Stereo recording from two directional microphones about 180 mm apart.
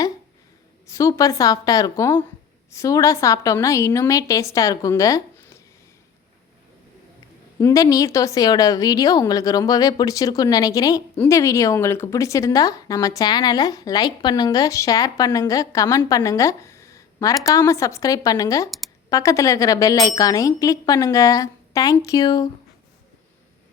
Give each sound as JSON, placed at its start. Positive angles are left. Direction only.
{"t": 0.9, "sound": "a woman's voice", "side_deg": 15}
{"t": 7.6, "sound": "speech", "side_deg": 20}